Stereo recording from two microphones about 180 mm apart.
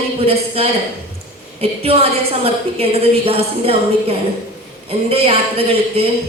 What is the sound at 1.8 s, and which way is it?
A woman's voice, 35° right (ahead or behind).